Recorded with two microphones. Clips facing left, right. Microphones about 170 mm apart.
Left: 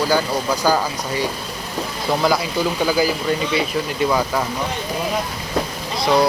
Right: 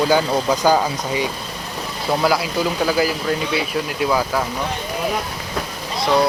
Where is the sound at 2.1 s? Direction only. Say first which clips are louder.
Right 1 dB; 5° right (ahead or behind).